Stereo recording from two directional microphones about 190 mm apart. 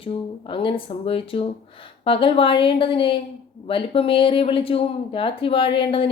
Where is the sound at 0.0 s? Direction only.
30° left (ahead or behind).